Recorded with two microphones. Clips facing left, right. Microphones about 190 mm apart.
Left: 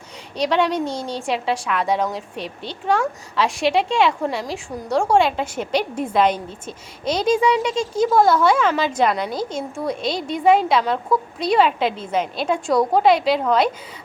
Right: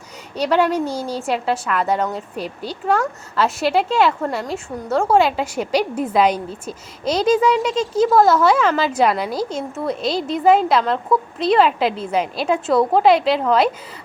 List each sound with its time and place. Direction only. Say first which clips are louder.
0.3 s a woman's voice: right 2 dB; 5° right (ahead or behind)
7.7 s speech: right 2 dB; 10° left (ahead or behind)
8.2 s a woman's voice: even; 5° right (ahead or behind)